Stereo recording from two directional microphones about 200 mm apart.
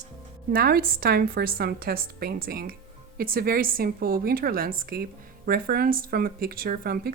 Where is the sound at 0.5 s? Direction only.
45° right (ahead or behind).